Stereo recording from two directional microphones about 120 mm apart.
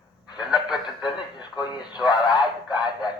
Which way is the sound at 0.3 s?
5° right (ahead or behind).